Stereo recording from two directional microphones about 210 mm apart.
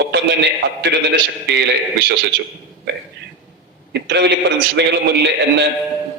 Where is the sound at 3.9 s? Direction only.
55° right (ahead or behind).